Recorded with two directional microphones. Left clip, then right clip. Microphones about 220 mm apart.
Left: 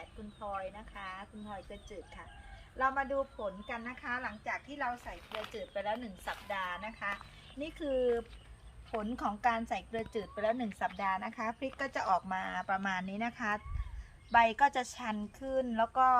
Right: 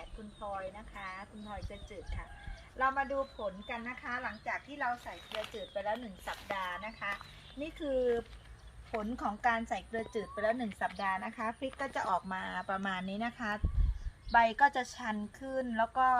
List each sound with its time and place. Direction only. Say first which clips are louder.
0.3 s a woman's voice: even; centre (ahead or behind)
11.9 s speech: left 2 dB; 20° right (ahead or behind)
14.3 s a woman's voice: even; 20° right (ahead or behind); by 16.1 s centre (ahead or behind)